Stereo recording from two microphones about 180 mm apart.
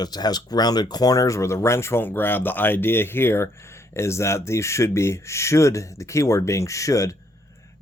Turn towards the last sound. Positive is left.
turn(degrees=15)  # may be behind; listen again after turning